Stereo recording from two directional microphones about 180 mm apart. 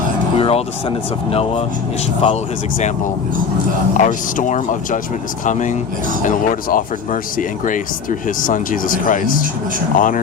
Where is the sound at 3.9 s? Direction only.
45° left (ahead or behind).